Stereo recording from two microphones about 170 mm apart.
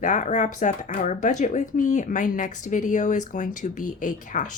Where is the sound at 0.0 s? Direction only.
45° left (ahead or behind).